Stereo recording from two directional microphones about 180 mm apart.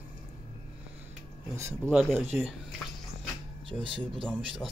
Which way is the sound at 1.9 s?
Centre (ahead or behind).